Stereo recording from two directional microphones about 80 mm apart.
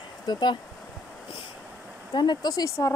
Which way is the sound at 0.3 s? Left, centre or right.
Left.